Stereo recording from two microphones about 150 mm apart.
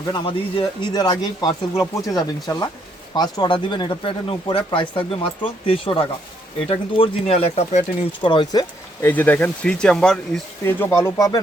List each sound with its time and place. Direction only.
0.1 s speech: 35° left (ahead or behind)
8.2 s speech: 30° left (ahead or behind)
9.0 s speech: 15° left (ahead or behind)
10.6 s speech: 15° left (ahead or behind)